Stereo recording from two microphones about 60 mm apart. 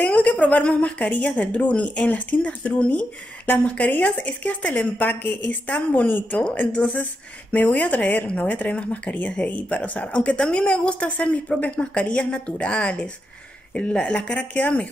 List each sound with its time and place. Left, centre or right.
0.0 s a woman's voice: left